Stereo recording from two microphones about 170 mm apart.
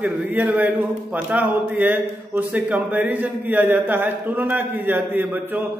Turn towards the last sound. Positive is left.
turn(degrees=-10)  # may be behind; listen again after turning